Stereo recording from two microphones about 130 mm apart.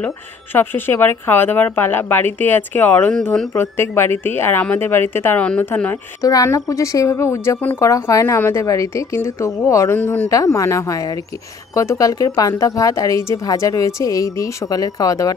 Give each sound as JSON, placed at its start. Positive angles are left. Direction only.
{"t": 0.0, "sound": "speech", "side_deg": 15}
{"t": 6.2, "sound": "a woman's voice", "side_deg": 25}
{"t": 10.3, "sound": "a woman's voice", "side_deg": 25}